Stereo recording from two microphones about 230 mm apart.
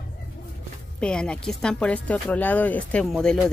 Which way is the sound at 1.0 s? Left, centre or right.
Centre.